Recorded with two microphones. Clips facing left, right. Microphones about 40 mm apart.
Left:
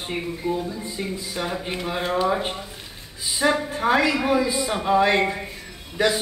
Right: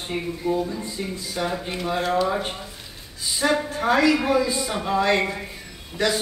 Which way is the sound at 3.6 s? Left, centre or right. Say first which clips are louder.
Right 1 dB; centre.